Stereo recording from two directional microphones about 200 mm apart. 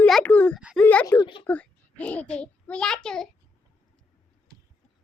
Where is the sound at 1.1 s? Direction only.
25° left (ahead or behind).